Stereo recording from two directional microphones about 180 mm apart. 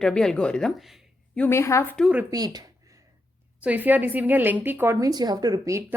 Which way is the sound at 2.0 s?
5° right (ahead or behind).